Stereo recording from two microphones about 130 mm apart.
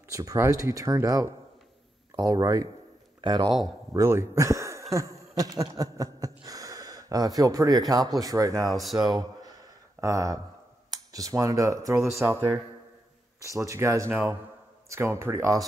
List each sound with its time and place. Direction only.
0.1 s speech: 25° right (ahead or behind)
3.9 s speech: 25° right (ahead or behind)
13.7 s speech: 25° right (ahead or behind)